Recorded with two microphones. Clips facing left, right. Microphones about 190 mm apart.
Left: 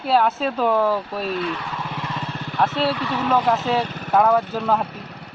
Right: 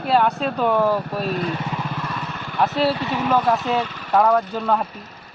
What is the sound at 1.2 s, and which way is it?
Speech, 45° right (ahead or behind).